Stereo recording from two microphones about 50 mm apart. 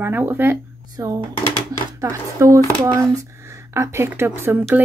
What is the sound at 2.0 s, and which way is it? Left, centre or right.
Speech, right.